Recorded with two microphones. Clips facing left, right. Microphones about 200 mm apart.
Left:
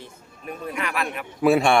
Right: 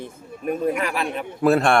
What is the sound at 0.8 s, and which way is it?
Speech, 35° right (ahead or behind).